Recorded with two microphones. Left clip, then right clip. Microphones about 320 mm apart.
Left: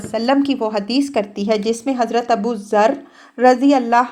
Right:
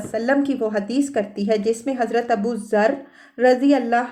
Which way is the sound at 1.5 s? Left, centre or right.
Left.